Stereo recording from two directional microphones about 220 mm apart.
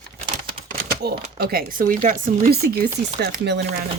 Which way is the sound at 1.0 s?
45° right (ahead or behind).